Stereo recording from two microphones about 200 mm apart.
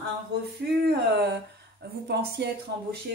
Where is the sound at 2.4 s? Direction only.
55° right (ahead or behind).